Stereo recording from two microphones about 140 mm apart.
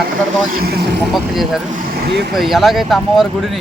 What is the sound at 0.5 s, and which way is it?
Speech, 90° right.